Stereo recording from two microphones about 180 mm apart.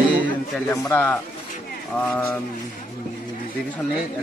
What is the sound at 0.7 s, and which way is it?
Speech, 15° left (ahead or behind).